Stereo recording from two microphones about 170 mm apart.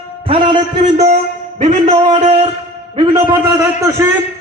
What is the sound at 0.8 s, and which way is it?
A man's voice, 45° right (ahead or behind).